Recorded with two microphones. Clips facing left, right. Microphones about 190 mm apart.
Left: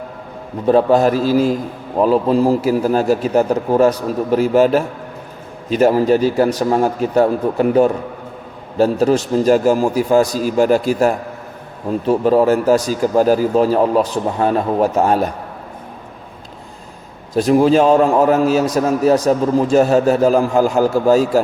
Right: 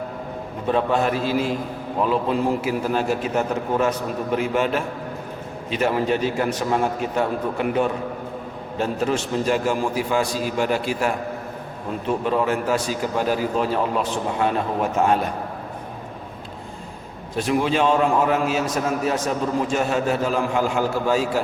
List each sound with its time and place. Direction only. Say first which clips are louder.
0.7 s a man's voice: left 8 dB; 35° left (ahead or behind)
17.3 s a man's voice: left 9 dB; 40° left (ahead or behind)